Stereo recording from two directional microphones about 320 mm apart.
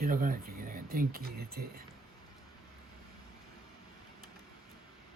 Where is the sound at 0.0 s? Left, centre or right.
Right.